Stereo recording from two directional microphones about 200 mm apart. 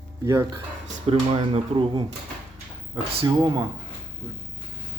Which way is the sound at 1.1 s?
25° right (ahead or behind).